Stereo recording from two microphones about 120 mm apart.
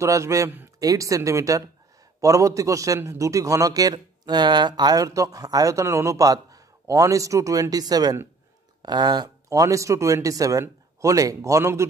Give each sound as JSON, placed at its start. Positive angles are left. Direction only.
{"t": 0.0, "sound": "a man's voice", "side_deg": -25}